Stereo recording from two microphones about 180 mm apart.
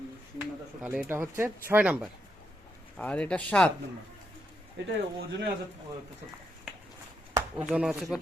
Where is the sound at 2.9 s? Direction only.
5° left (ahead or behind).